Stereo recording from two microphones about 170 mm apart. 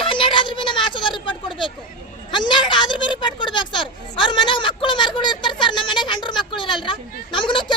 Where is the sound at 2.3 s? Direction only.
25° left (ahead or behind).